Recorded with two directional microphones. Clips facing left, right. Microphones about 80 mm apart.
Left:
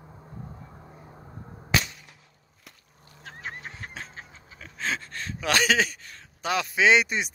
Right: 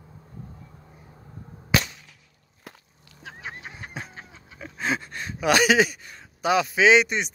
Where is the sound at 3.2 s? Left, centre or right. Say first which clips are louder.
Even; centre.